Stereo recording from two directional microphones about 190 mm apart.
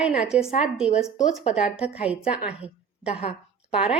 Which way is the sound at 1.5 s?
5° right (ahead or behind).